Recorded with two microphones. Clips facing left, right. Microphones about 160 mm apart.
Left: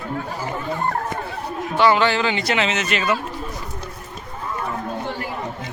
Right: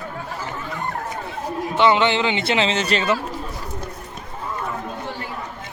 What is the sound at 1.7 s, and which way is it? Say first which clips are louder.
A man's voice: even; 20° right (ahead or behind).